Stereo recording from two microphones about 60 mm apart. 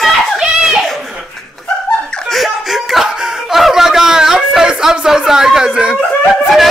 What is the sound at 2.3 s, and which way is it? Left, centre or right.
Speech, centre.